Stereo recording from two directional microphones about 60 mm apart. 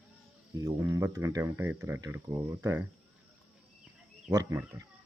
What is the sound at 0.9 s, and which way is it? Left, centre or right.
Speech, right.